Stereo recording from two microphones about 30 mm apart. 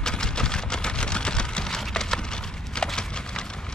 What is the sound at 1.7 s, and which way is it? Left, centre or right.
Wood, centre.